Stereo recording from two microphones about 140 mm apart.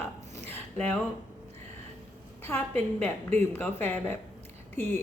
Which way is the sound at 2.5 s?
15° left (ahead or behind).